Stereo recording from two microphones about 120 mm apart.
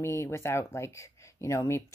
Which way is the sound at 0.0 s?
25° left (ahead or behind).